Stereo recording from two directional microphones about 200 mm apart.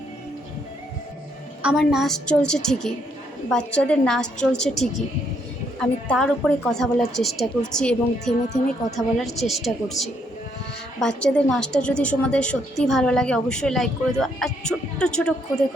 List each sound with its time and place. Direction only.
1.6 s a woman's voice: 5° right (ahead or behind)